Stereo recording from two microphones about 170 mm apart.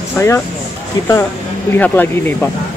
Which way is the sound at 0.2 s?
15° left (ahead or behind).